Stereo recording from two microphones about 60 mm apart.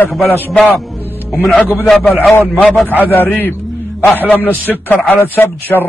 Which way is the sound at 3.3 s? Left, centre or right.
Left.